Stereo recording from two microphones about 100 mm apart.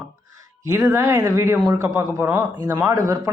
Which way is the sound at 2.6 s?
30° right (ahead or behind).